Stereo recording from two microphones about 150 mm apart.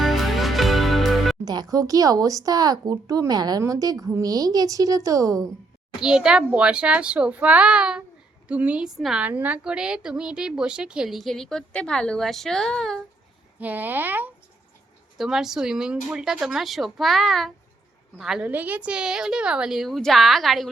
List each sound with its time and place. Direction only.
0.0 s music: centre (ahead or behind)
1.7 s a woman's voice: 25° right (ahead or behind)
6.0 s a child's voice: 5° right (ahead or behind)
13.6 s a child's voice: 10° right (ahead or behind)